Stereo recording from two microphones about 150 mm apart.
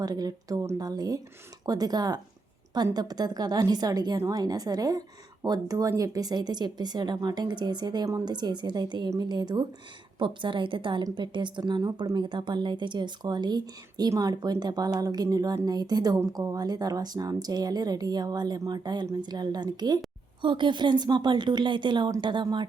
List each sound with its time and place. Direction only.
0.0 s a woman's voice: 25° right (ahead or behind)